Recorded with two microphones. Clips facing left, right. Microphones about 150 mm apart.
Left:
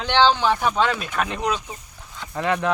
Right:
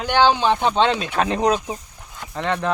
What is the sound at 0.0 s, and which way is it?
Speech, 10° right (ahead or behind).